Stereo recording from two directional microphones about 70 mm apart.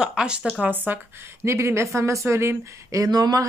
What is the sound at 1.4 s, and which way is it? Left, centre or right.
A woman's voice, right.